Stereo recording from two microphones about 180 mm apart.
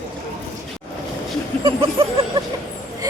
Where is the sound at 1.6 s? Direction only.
30° right (ahead or behind).